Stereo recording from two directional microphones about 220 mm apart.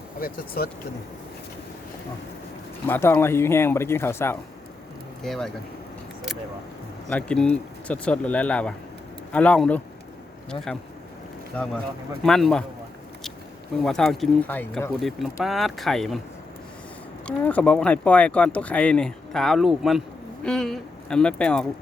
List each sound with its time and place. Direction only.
0.2 s speech: 45° left (ahead or behind)
2.8 s speech: 10° left (ahead or behind)
7.1 s speech: 5° left (ahead or behind)
11.5 s speech: 5° left (ahead or behind)
13.8 s speech: centre (ahead or behind)
17.2 s speech: 5° left (ahead or behind)